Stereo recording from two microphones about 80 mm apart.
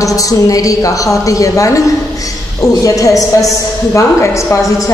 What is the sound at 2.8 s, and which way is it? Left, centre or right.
A woman's voice, left.